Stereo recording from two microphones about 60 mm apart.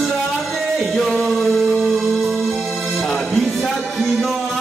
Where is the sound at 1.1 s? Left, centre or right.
Centre.